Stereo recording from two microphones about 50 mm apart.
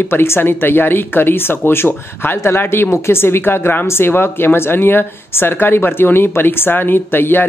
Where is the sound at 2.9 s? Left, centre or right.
Left.